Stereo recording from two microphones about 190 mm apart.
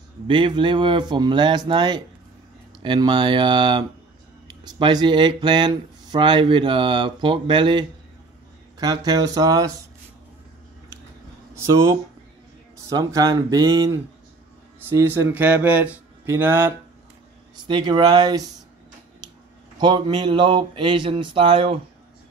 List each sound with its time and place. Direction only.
0.3 s speech: 25° right (ahead or behind)
11.5 s speech: 15° right (ahead or behind)
17.6 s speech: 25° right (ahead or behind)
19.8 s speech: 25° right (ahead or behind)